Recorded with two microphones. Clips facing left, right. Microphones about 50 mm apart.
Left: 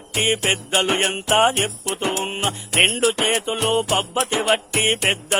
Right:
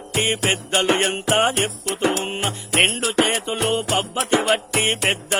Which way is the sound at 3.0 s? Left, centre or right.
Left.